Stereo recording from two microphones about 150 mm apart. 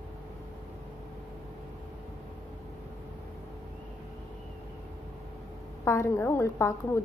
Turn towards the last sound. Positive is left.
turn(degrees=20)  # may be behind; listen again after turning